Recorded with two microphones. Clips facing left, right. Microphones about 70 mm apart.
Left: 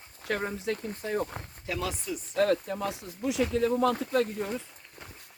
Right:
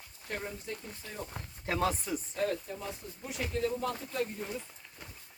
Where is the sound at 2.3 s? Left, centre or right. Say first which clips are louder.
Left 10 dB; left.